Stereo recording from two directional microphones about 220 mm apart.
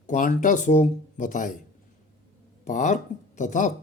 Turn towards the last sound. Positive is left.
turn(degrees=35)  # may be behind; listen again after turning